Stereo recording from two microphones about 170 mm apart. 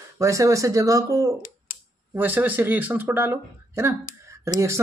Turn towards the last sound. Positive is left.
turn(degrees=-15)  # may be behind; listen again after turning